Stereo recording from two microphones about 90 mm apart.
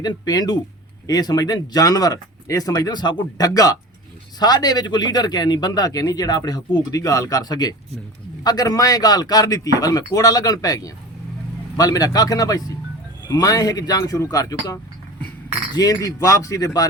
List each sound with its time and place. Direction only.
0.0 s a man's voice: 50° left (ahead or behind)